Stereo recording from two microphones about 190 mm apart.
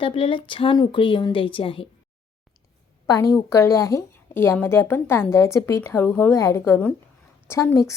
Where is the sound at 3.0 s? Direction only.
15° left (ahead or behind).